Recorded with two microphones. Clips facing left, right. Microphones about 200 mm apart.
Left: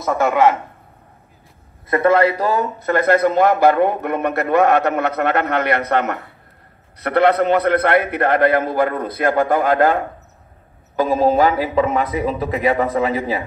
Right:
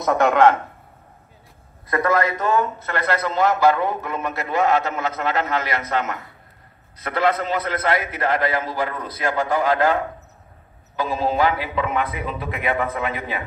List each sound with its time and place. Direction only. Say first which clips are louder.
0.0 s a man's voice: even; centre (ahead or behind)
1.9 s a man's voice: left 6 dB; 30° left (ahead or behind)